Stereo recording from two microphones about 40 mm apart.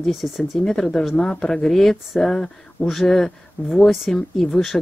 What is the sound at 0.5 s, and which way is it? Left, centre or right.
Speech, centre.